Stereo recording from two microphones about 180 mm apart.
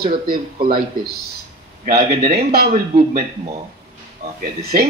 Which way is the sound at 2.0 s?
35° right (ahead or behind).